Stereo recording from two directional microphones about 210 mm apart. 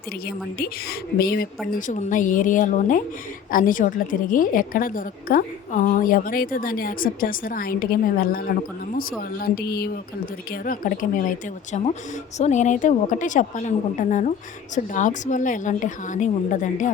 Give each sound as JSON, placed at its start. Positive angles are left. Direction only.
{"t": 0.3, "sound": "a woman's voice", "side_deg": 45}